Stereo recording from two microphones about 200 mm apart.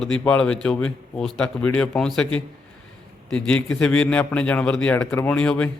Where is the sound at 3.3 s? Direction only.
5° left (ahead or behind).